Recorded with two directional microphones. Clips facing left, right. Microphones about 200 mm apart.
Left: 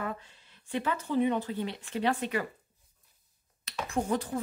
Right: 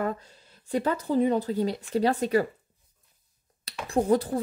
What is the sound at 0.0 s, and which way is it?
Speech, 40° right (ahead or behind).